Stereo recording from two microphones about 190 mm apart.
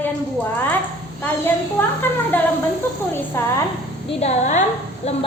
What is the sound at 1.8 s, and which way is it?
Speech, 10° left (ahead or behind).